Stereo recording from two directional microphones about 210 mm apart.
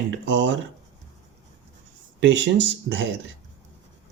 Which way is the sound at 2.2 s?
55° right (ahead or behind).